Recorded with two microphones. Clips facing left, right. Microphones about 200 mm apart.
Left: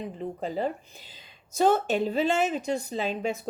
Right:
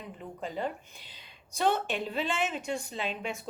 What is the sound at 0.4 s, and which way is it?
Speech, 35° left (ahead or behind).